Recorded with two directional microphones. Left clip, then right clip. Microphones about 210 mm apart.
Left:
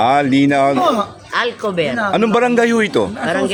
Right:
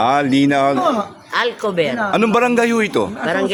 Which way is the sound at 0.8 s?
45° left (ahead or behind).